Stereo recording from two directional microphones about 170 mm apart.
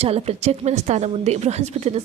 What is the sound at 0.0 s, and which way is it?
A woman's voice, 35° right (ahead or behind).